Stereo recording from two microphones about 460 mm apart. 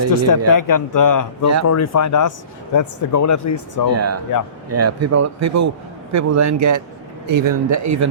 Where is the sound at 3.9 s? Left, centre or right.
Right.